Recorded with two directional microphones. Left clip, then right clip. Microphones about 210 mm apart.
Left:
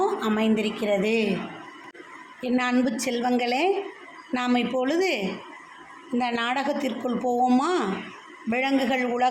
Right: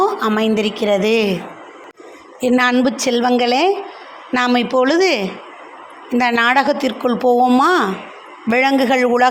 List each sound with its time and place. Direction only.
0.0 s a woman's voice: 20° right (ahead or behind)
2.4 s a woman's voice: 25° right (ahead or behind)